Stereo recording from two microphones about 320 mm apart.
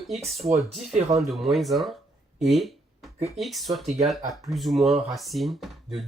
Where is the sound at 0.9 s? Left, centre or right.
Right.